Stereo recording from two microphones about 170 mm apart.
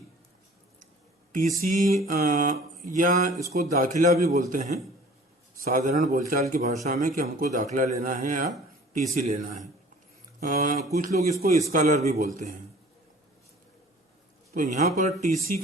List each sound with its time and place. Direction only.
1.3 s a sound: 50° right (ahead or behind)
1.6 s a man's voice: 50° right (ahead or behind)
11.7 s speech: 50° right (ahead or behind)
14.5 s speech: 50° right (ahead or behind)